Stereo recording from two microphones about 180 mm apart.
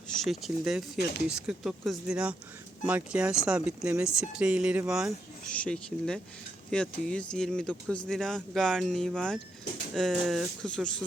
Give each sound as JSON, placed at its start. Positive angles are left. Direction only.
{"t": 0.3, "sound": "speech", "side_deg": 0}